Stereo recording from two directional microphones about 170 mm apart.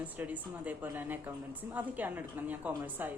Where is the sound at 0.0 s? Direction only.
10° right (ahead or behind).